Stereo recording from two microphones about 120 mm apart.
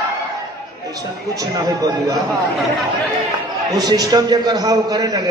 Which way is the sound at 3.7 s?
35° right (ahead or behind).